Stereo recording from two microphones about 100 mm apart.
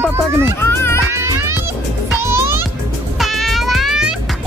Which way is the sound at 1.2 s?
25° right (ahead or behind).